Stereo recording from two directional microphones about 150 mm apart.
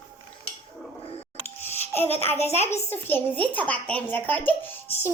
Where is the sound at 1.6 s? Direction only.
15° left (ahead or behind).